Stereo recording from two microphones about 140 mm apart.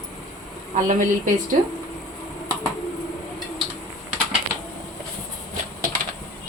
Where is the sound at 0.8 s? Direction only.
70° right (ahead or behind).